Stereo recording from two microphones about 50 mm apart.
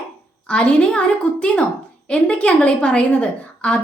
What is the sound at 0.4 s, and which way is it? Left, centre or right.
A woman's voice, left.